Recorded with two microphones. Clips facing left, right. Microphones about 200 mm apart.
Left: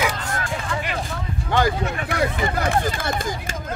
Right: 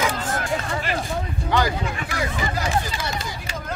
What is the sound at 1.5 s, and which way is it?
Speech, 55° left (ahead or behind).